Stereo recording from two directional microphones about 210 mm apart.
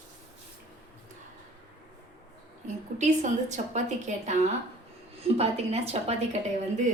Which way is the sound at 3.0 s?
35° right (ahead or behind).